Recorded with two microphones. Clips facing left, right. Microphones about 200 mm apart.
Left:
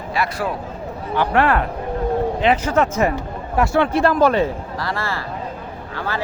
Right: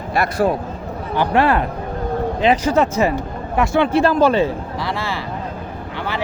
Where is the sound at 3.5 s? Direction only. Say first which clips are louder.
Right 1 dB; 25° right (ahead or behind).